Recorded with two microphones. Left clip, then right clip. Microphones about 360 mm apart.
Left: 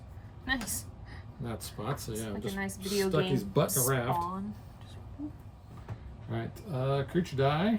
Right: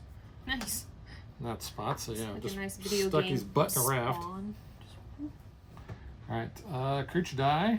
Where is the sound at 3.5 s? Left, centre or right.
Centre.